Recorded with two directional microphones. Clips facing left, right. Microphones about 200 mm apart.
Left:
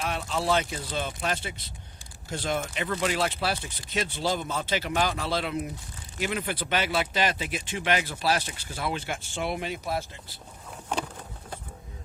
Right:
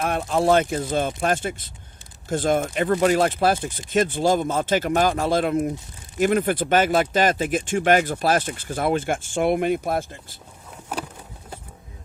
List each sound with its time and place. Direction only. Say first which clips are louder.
0.0 s speech: right 8 dB; 50° right (ahead or behind)
10.9 s vehicle: even; 5° right (ahead or behind)